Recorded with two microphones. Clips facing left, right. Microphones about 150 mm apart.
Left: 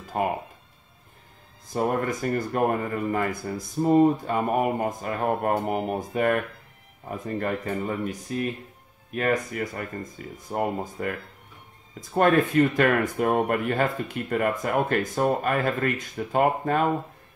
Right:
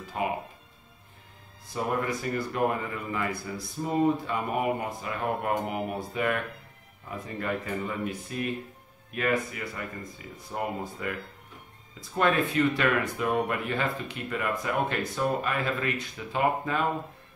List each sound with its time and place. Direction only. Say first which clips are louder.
0.2 s speech: left 4 dB; 50° left (ahead or behind)
1.7 s speech: left 4 dB; 45° left (ahead or behind)